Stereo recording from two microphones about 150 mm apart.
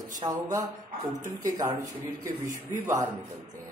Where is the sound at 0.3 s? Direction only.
25° right (ahead or behind).